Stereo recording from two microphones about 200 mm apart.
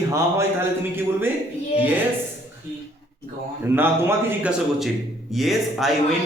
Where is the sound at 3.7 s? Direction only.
10° right (ahead or behind).